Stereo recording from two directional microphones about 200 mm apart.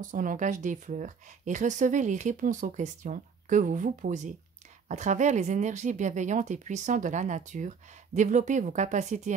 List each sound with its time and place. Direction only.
0.0 s speech: 40° right (ahead or behind)